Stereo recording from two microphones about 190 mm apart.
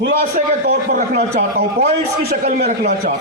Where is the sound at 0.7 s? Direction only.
45° right (ahead or behind).